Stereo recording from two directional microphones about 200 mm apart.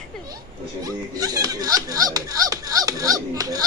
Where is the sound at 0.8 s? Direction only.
20° right (ahead or behind).